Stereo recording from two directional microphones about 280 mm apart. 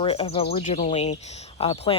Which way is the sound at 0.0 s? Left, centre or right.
Centre.